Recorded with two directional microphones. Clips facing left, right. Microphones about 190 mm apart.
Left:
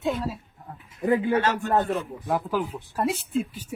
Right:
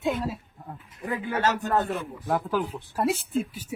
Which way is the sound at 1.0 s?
30° left (ahead or behind).